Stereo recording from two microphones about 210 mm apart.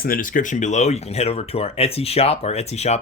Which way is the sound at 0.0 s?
40° left (ahead or behind).